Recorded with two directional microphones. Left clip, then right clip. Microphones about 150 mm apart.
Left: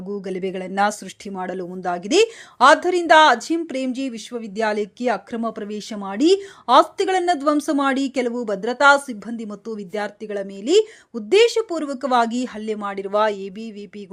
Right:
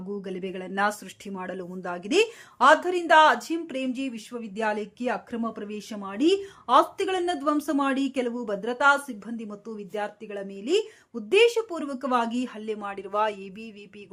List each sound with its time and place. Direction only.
0.1 s speech: 30° left (ahead or behind)